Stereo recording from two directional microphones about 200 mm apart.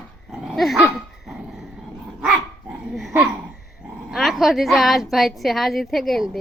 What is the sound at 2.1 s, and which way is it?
Dog, 5° right (ahead or behind).